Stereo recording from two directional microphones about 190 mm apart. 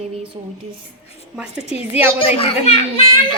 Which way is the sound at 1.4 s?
5° right (ahead or behind).